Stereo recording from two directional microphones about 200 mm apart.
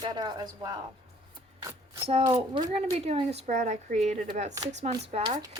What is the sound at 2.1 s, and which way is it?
Speech, 30° right (ahead or behind).